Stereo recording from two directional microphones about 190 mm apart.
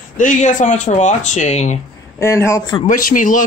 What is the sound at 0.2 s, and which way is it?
Speech, 40° left (ahead or behind).